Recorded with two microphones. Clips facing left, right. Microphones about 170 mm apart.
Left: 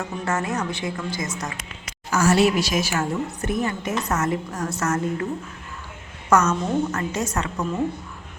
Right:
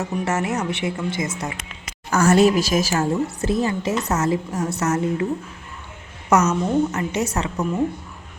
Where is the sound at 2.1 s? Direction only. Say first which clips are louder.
Right 3 dB; 50° right (ahead or behind).